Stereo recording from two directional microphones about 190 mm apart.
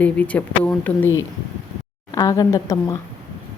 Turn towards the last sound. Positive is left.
turn(degrees=15)  # may be behind; listen again after turning